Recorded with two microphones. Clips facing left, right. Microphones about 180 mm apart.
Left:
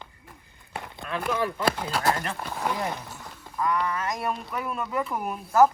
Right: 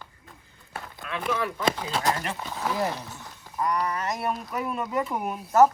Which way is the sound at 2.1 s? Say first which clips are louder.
Left 2 dB; 5° right (ahead or behind).